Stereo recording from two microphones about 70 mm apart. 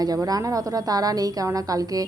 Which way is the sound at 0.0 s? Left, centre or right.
Right.